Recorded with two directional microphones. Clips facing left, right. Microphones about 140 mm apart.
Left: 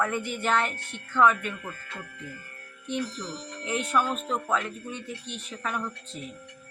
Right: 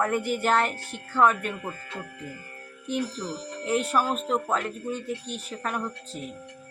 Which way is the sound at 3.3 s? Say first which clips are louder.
Right 6 dB; 5° right (ahead or behind).